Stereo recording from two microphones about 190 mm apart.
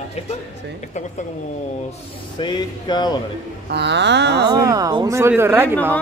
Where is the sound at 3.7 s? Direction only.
65° right (ahead or behind).